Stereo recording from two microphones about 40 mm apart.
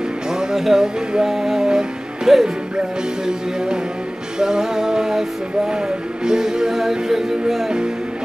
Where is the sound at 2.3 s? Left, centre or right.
Centre.